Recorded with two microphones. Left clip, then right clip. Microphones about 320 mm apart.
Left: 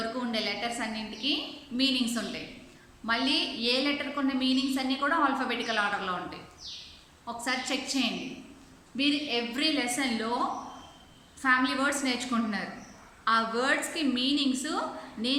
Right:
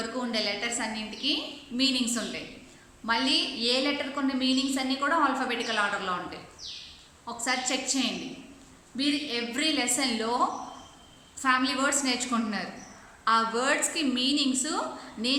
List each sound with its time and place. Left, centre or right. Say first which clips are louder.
0.2 s a woman's voice: right 5 dB; centre
7.3 s a woman's voice: right 2 dB; centre
11.4 s a woman's voice: even; centre